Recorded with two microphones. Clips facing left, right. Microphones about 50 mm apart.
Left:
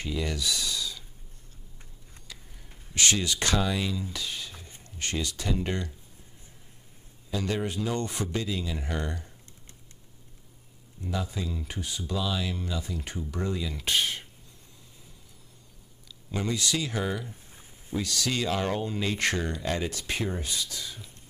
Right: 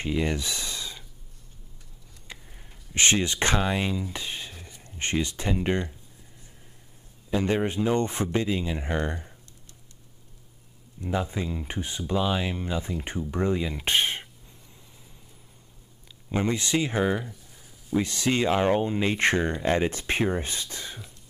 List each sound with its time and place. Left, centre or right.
0.0 s a sound: right
2.2 s speech: right
7.2 s speech: right
11.0 s speech: right
16.3 s speech: right
17.3 s a sound: left
17.9 s speech: right